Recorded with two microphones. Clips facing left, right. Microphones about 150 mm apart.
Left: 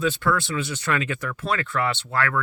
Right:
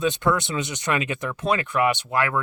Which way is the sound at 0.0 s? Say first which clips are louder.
Right 1 dB; 20° right (ahead or behind).